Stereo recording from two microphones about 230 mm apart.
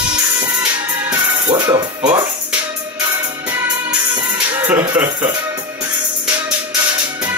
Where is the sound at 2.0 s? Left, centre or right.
Right.